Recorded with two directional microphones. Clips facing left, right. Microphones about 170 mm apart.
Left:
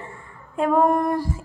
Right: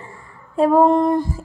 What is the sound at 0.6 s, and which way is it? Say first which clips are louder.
Female singing: right 5 dB; 30° right (ahead or behind).